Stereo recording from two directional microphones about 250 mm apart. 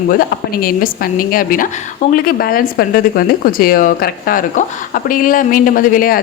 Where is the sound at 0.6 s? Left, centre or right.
Left.